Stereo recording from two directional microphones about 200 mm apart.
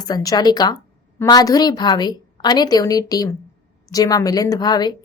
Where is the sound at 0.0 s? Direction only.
20° left (ahead or behind).